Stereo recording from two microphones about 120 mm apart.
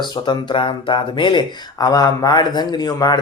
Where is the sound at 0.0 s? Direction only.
40° left (ahead or behind).